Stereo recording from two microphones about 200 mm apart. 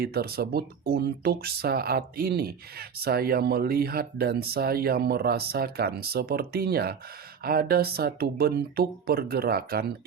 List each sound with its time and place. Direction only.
0.0 s speech: 50° right (ahead or behind)